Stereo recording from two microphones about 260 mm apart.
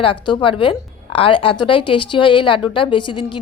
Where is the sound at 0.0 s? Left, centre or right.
Centre.